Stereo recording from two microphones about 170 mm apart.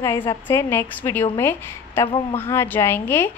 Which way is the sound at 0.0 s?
15° left (ahead or behind).